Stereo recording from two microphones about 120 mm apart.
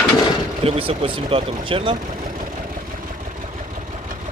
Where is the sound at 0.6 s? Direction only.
50° right (ahead or behind).